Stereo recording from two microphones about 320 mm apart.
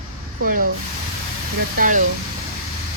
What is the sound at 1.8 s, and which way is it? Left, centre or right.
Speech, right.